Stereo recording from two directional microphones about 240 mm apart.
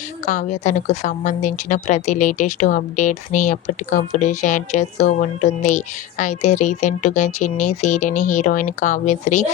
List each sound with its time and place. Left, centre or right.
0.3 s a woman's voice: left